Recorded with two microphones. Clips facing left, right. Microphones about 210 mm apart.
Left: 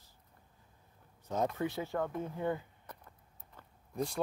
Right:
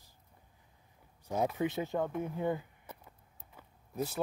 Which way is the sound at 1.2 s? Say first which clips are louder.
Right 2 dB; 10° right (ahead or behind).